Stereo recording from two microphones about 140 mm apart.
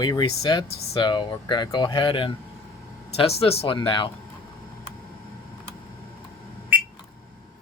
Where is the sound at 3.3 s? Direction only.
45° left (ahead or behind).